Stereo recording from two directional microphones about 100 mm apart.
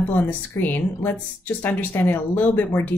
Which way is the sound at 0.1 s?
15° left (ahead or behind).